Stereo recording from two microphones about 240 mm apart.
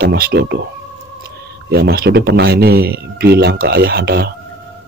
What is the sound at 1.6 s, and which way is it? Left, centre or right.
Speech, right.